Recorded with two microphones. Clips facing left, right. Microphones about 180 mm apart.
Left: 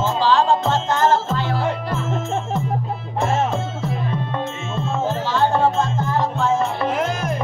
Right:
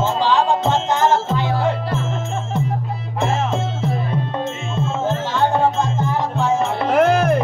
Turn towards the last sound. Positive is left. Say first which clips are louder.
# right 7 dB
turn(degrees=-60)  # may be behind; listen again after turning